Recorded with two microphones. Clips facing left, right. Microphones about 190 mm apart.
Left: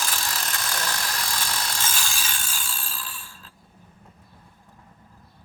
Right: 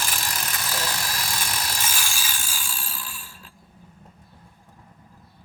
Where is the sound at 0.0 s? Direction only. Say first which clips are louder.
Even; 10° right (ahead or behind).